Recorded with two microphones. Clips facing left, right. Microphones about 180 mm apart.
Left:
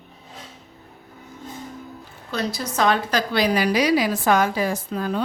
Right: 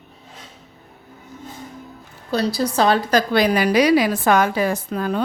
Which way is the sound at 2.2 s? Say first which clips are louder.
Right 6 dB; 35° right (ahead or behind).